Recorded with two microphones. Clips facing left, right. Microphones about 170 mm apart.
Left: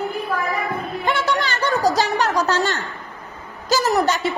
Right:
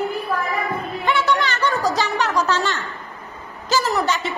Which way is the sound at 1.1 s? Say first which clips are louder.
Right 2 dB; 40° left (ahead or behind).